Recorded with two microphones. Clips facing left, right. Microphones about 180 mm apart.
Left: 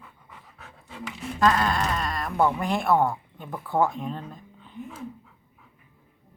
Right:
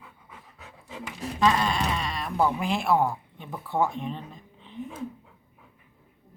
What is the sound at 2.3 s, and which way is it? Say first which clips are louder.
Speech: left 1 dB; 5° right (ahead or behind).